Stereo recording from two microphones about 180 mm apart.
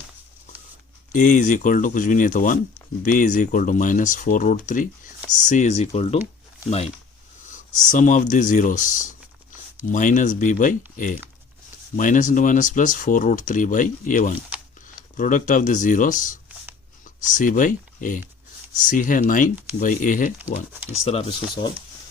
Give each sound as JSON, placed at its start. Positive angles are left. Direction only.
{"t": 1.1, "sound": "speech", "side_deg": 45}
{"t": 20.9, "sound": "speech", "side_deg": 35}